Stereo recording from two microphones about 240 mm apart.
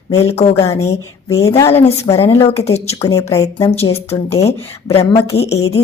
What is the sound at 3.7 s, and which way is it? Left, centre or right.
Speech, left.